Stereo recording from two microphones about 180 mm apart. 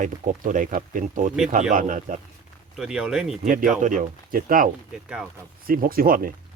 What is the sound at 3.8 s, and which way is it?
Speech, 45° right (ahead or behind).